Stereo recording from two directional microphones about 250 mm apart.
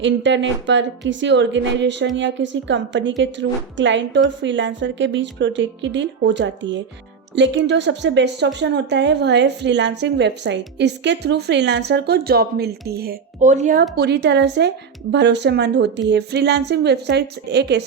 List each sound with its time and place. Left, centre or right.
0.0 s a woman's voice: right
13.9 s a woman's voice: right